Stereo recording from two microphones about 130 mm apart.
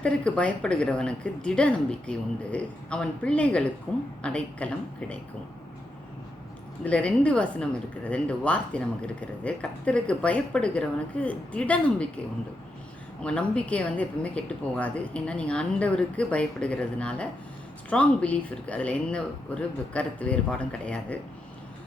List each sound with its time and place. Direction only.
0.0 s a woman's voice: 10° left (ahead or behind)
6.8 s a woman's voice: 10° left (ahead or behind)
13.2 s a woman's voice: 10° left (ahead or behind)